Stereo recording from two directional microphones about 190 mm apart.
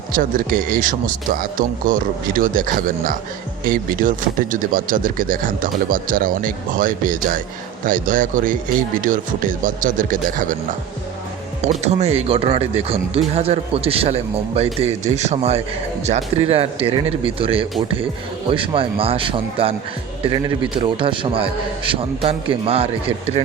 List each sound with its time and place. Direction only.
0.1 s speech: 45° right (ahead or behind)
11.6 s speech: 35° right (ahead or behind)